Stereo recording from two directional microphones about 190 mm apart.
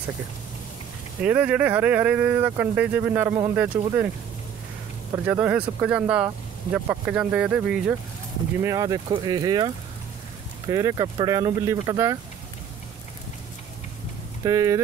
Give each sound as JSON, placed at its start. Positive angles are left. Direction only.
{"t": 1.2, "sound": "speech", "side_deg": -5}
{"t": 5.1, "sound": "speech", "side_deg": -10}
{"t": 8.5, "sound": "speech", "side_deg": -15}
{"t": 14.4, "sound": "speech", "side_deg": -15}